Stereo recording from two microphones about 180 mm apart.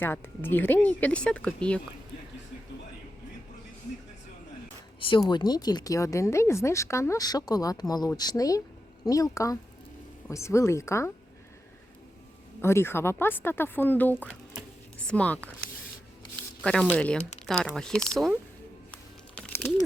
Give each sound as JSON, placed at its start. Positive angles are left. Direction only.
{"t": 0.0, "sound": "speech", "side_deg": 10}
{"t": 4.9, "sound": "speech", "side_deg": 30}
{"t": 12.6, "sound": "speech", "side_deg": 15}
{"t": 16.6, "sound": "speech", "side_deg": 5}